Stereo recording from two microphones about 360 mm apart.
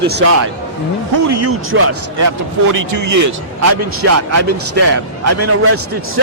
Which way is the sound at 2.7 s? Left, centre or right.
Right.